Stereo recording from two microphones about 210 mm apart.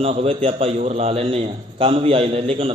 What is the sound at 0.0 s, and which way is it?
A man's voice, 30° right (ahead or behind).